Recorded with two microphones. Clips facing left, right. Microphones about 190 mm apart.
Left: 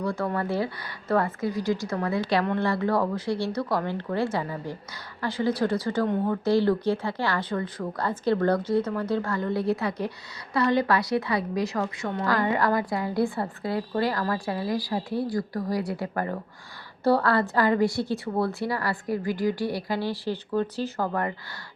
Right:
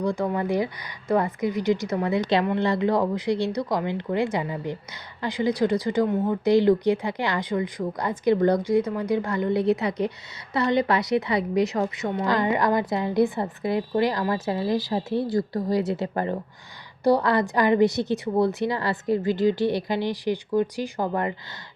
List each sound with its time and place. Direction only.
0.0 s speech: 15° right (ahead or behind)
6.1 s speech: 5° right (ahead or behind)
6.4 s a woman's voice: 15° right (ahead or behind)